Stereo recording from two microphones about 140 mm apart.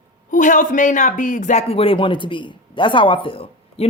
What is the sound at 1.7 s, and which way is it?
Speech, 40° left (ahead or behind).